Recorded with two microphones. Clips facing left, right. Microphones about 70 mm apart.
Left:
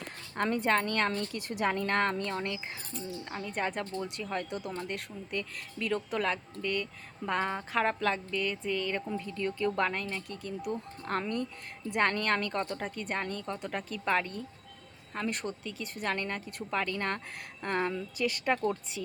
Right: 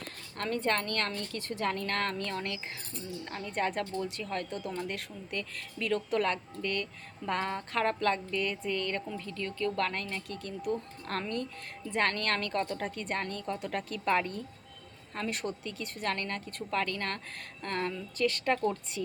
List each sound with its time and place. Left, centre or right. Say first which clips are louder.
0.3 s a woman's voice: left 3 dB; centre
9.9 s a woman's voice: left 1 dB; centre